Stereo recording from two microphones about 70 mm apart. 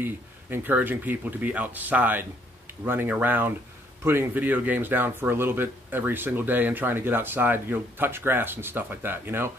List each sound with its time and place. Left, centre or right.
0.0 s speech: right